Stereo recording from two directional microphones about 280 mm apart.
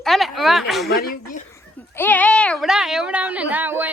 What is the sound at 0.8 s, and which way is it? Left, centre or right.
Speech, left.